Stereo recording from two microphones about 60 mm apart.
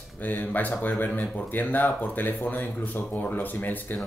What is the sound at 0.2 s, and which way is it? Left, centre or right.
Speech, left.